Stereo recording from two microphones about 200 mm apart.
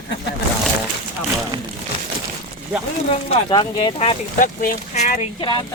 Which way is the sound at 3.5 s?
25° left (ahead or behind).